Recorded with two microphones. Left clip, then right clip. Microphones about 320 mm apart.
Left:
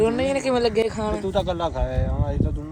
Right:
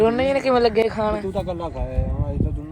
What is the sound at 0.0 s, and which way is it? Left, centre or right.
Speech, centre.